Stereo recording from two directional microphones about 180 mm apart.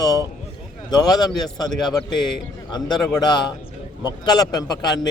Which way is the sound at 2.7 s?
25° left (ahead or behind).